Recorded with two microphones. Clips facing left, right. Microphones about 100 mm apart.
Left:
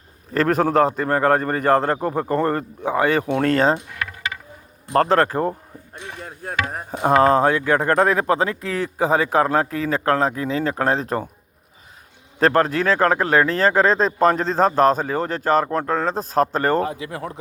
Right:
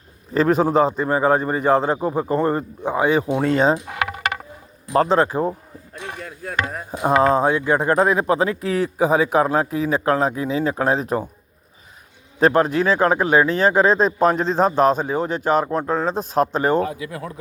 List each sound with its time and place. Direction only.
0.3 s a man's voice: 60° left (ahead or behind)
3.8 s coin: 90° right
4.9 s a man's voice: 55° left (ahead or behind)
6.2 s speech: 35° left (ahead or behind)
7.0 s a man's voice: 55° left (ahead or behind)
8.3 s speech: 45° left (ahead or behind)
12.5 s speech: 45° left (ahead or behind)
15.0 s a man's voice: 60° left (ahead or behind)
15.3 s speech: 40° left (ahead or behind)
16.8 s speech: 30° left (ahead or behind)